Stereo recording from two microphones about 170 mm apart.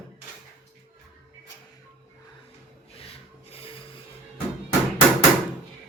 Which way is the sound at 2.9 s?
35° left (ahead or behind).